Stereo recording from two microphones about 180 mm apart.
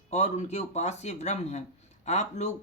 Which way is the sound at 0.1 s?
40° left (ahead or behind).